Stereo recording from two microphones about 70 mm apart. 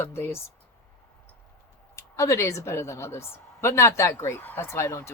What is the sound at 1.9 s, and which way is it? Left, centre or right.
Speech, left.